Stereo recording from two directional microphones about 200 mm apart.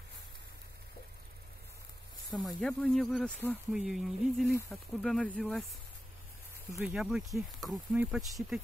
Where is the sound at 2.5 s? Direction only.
5° left (ahead or behind).